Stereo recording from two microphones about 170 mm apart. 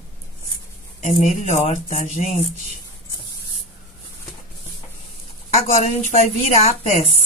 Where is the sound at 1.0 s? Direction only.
40° left (ahead or behind).